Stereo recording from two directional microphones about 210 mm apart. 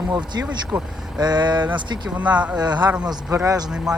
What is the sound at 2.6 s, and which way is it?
Speech, 20° right (ahead or behind).